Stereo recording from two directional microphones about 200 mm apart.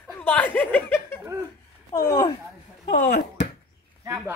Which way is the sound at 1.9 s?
20° left (ahead or behind).